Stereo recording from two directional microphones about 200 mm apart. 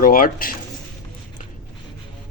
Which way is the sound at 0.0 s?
45° left (ahead or behind).